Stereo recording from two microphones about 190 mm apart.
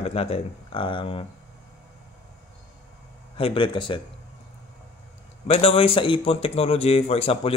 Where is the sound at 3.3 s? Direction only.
25° left (ahead or behind).